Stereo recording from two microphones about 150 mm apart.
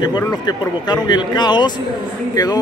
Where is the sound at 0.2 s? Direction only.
25° left (ahead or behind).